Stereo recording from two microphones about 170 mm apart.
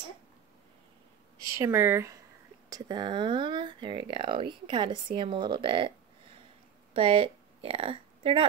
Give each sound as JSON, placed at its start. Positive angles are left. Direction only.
{"t": 1.4, "sound": "speech", "side_deg": -15}
{"t": 2.7, "sound": "speech", "side_deg": -25}